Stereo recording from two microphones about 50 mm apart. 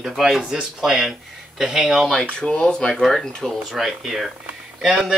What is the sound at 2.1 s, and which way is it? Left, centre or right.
Speech, centre.